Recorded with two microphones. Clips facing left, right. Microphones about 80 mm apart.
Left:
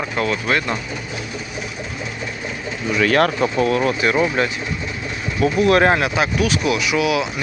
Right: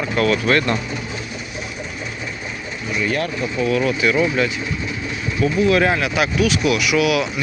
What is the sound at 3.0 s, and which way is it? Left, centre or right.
Speech, left.